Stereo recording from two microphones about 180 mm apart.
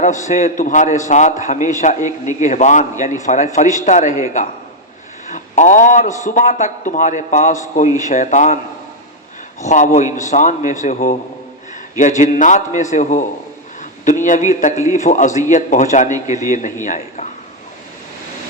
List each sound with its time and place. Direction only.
0.0 s a man's voice: 45° left (ahead or behind)
9.6 s a man's voice: 40° left (ahead or behind)